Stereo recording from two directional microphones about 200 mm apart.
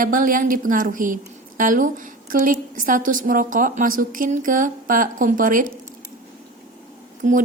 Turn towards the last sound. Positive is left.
turn(degrees=-40)  # may be behind; listen again after turning